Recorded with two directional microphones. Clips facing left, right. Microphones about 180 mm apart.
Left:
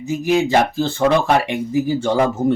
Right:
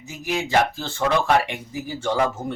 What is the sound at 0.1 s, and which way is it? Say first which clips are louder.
Speech: left 7 dB; 25° left (ahead or behind).